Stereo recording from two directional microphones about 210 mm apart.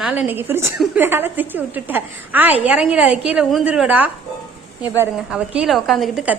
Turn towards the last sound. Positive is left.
turn(degrees=-5)  # may be behind; listen again after turning